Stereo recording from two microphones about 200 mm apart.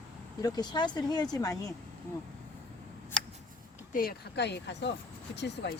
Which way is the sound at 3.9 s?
50° left (ahead or behind).